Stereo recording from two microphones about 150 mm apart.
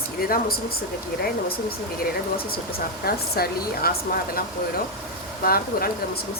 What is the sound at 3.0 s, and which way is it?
A woman's voice, 90° left.